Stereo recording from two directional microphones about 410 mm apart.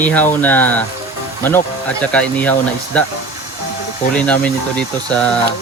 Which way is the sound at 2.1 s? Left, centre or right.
Centre.